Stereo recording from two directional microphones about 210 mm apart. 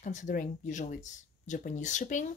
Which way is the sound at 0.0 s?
35° left (ahead or behind).